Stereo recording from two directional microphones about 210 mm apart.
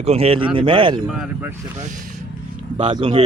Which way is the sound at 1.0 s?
Centre (ahead or behind).